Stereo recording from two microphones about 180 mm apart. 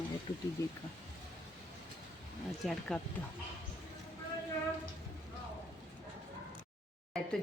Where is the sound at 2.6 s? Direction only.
Centre (ahead or behind).